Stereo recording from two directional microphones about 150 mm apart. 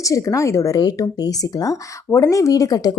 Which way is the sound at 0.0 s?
20° left (ahead or behind).